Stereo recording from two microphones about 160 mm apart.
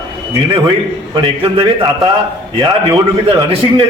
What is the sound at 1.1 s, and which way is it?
Speech, 30° right (ahead or behind).